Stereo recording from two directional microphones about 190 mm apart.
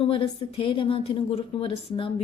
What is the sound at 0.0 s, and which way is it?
Speech, 30° left (ahead or behind).